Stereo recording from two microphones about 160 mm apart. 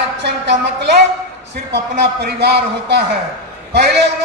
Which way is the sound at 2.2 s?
90° right.